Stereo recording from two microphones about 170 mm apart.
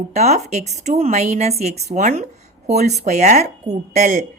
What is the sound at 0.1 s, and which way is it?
A woman's voice, 40° right (ahead or behind).